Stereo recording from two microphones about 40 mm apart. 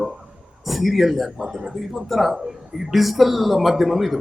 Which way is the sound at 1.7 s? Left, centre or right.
Centre.